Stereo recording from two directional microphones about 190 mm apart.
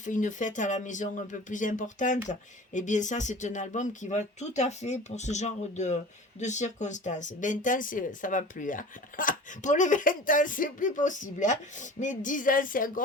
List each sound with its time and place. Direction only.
0.0 s speech: 40° left (ahead or behind)